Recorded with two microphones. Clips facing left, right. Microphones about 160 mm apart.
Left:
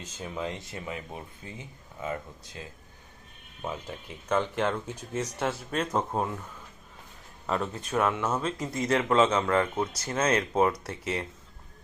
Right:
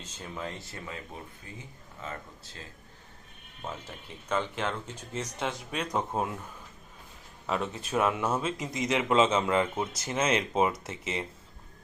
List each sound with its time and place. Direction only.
0.0 s speech: 10° left (ahead or behind)
3.6 s speech: 15° left (ahead or behind)
7.4 s speech: centre (ahead or behind)
8.7 s speech: 15° right (ahead or behind)
9.9 s speech: 25° right (ahead or behind)
10.2 s speech: 10° right (ahead or behind)